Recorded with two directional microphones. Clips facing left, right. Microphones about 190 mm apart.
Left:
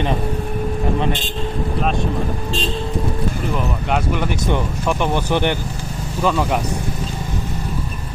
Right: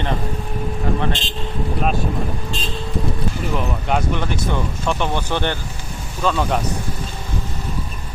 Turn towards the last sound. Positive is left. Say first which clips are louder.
# left 2 dB
turn(degrees=5)  # may be behind; listen again after turning